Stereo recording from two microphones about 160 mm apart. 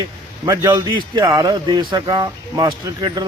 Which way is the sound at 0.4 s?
20° right (ahead or behind).